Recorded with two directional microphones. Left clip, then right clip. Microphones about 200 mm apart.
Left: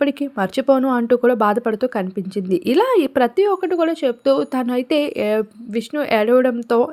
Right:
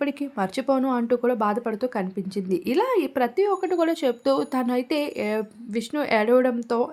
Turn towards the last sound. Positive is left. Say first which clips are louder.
# left 5 dB
turn(degrees=15)  # may be behind; listen again after turning